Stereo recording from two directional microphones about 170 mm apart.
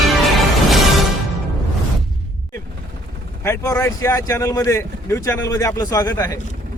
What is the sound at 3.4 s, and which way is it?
Speech, 15° left (ahead or behind).